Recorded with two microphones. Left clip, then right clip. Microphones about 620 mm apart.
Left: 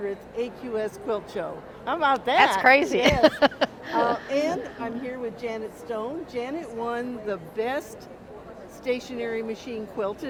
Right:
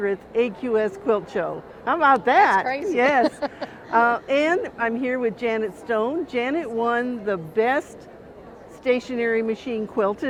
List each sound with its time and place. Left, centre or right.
0.0 s speech: right
2.6 s speech: left
4.3 s speech: right